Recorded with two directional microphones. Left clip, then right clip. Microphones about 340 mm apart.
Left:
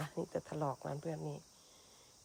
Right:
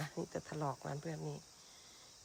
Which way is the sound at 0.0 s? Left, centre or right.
Centre.